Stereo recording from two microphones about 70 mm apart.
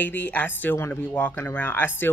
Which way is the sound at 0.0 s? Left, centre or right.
Left.